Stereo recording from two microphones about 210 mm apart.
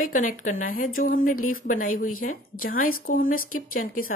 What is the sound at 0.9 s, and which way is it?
Speech, 75° left (ahead or behind).